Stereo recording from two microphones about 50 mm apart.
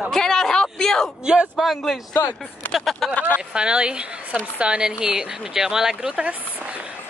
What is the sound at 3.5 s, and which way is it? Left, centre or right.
Speech, right.